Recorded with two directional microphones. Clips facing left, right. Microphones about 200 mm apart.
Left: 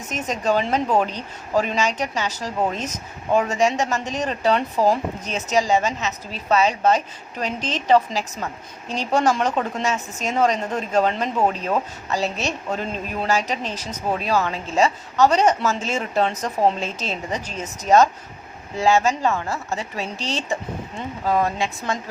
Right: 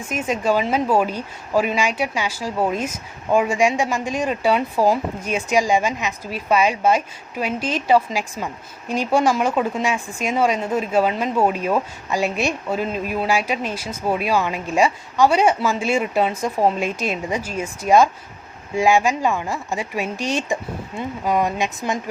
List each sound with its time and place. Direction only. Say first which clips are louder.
0.0 s speech: right 3 dB; 10° right (ahead or behind)